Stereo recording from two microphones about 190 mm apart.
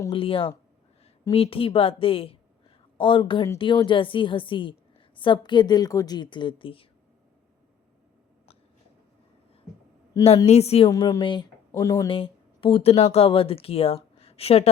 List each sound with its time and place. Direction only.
0.1 s a woman's voice: 30° left (ahead or behind)
10.2 s a woman's voice: 35° left (ahead or behind)
10.9 s a woman's voice: 20° left (ahead or behind)
12.0 s speech: 30° left (ahead or behind)